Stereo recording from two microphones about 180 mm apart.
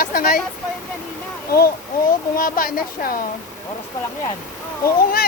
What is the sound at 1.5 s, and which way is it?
A woman's voice, 60° left (ahead or behind).